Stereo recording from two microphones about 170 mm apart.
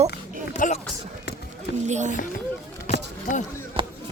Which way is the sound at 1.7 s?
45° right (ahead or behind).